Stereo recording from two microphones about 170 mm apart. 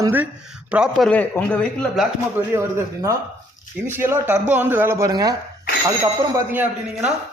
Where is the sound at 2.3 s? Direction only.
15° right (ahead or behind).